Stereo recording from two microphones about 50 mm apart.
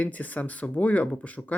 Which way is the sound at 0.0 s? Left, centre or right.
Left.